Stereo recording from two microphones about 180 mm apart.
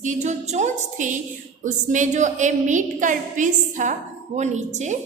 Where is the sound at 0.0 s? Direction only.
40° right (ahead or behind).